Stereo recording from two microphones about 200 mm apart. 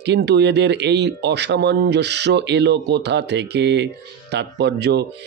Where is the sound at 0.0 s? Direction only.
60° right (ahead or behind).